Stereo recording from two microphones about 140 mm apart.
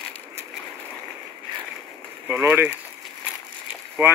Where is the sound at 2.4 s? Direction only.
15° right (ahead or behind).